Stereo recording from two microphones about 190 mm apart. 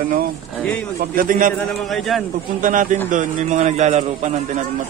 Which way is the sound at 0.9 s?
45° right (ahead or behind).